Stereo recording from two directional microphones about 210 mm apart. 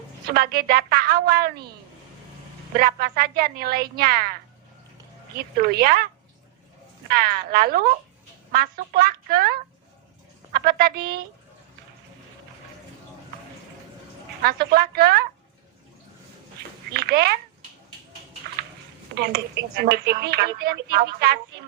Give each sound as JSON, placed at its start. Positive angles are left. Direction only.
{"t": 0.3, "sound": "speech", "side_deg": -45}
{"t": 2.7, "sound": "speech", "side_deg": -45}
{"t": 5.4, "sound": "speech", "side_deg": -45}
{"t": 7.1, "sound": "speech", "side_deg": -45}
{"t": 14.4, "sound": "speech", "side_deg": -45}
{"t": 16.9, "sound": "a child's voice", "side_deg": -50}
{"t": 19.1, "sound": "speech", "side_deg": -50}